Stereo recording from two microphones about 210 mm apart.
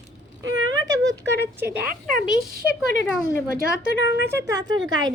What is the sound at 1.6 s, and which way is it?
Speech, 45° right (ahead or behind).